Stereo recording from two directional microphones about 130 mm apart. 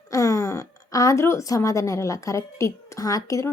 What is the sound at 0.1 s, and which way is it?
A woman's voice, 25° left (ahead or behind).